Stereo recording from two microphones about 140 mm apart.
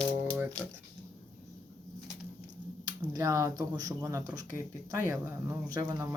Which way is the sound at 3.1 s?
25° right (ahead or behind).